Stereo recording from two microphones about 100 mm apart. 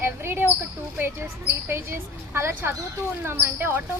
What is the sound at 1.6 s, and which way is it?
Speech, 25° right (ahead or behind).